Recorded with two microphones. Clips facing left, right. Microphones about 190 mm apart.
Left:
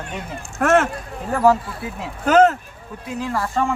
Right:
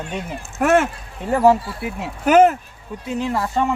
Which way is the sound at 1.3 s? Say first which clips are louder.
Right 2 dB; 20° right (ahead or behind).